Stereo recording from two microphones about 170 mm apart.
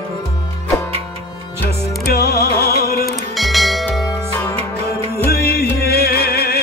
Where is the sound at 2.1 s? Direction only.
65° left (ahead or behind).